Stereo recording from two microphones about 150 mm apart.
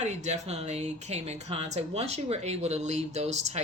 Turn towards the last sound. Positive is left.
turn(degrees=-45)  # may be behind; listen again after turning